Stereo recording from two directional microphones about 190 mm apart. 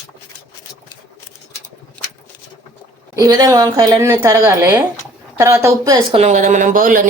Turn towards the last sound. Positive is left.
turn(degrees=-45)  # may be behind; listen again after turning